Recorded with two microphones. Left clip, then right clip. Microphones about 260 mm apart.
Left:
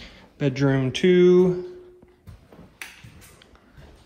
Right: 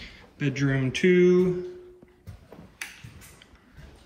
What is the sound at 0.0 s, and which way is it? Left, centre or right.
Speech, centre.